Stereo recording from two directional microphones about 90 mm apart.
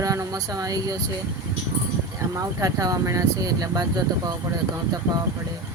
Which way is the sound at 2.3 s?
35° right (ahead or behind).